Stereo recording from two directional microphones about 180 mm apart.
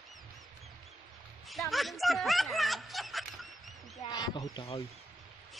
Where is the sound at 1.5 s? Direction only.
Centre (ahead or behind).